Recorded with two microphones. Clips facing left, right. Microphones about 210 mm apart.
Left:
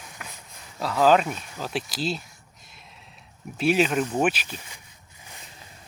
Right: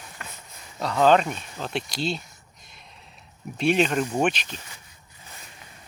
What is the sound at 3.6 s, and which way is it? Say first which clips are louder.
Speech: even; 5° left (ahead or behind).